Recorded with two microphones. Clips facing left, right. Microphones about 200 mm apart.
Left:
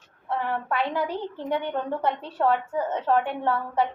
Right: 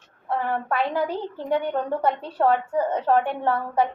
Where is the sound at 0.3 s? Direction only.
45° right (ahead or behind).